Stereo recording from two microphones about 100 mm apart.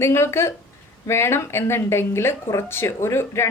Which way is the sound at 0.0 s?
25° left (ahead or behind).